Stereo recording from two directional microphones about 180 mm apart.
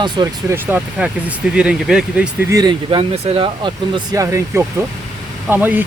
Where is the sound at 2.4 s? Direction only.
20° right (ahead or behind).